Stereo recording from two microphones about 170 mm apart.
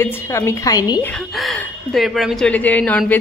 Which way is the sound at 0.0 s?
15° left (ahead or behind).